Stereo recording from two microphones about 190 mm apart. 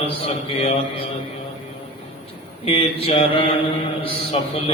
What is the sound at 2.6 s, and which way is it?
A man's voice, 30° left (ahead or behind).